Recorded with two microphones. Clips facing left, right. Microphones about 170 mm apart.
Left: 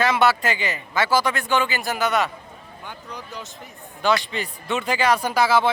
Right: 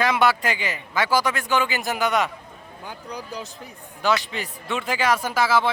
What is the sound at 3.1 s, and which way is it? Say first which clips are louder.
Speech: right 4 dB; 35° right (ahead or behind).